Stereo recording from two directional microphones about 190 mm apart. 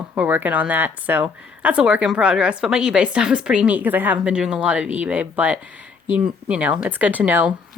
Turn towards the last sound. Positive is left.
turn(degrees=-10)  # may be behind; listen again after turning